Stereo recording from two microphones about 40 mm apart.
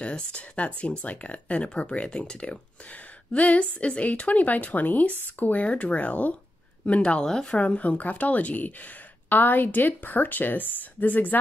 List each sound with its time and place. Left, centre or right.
0.0 s speech: left
2.9 s a sound: left
3.6 s speech: left
4.1 s speech: left
7.2 s speech: centre
7.5 s a woman's voice: left